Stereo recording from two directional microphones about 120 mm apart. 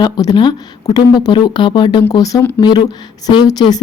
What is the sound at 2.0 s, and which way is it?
A woman's voice, 30° left (ahead or behind).